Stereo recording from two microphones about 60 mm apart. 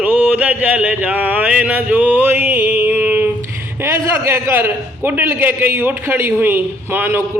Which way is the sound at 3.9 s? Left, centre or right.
Right.